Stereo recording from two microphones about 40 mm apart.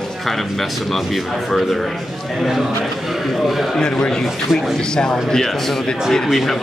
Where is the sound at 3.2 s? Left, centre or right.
Centre.